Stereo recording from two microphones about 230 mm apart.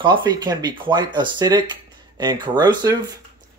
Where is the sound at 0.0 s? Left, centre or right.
Centre.